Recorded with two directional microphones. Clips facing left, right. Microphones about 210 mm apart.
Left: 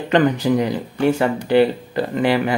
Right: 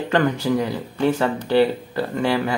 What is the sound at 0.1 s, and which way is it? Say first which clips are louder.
Speech: left 4 dB; 15° left (ahead or behind).